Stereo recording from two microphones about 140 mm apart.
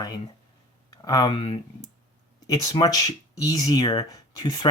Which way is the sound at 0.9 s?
25° left (ahead or behind).